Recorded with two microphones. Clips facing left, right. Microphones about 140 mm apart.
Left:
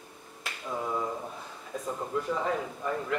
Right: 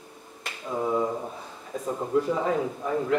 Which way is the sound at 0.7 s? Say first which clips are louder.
Right 7 dB; 15° right (ahead or behind).